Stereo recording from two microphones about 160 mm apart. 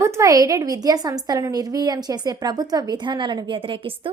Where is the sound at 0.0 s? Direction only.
20° right (ahead or behind).